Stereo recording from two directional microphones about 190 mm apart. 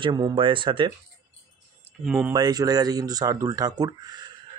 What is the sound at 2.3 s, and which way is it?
Speech, 20° right (ahead or behind).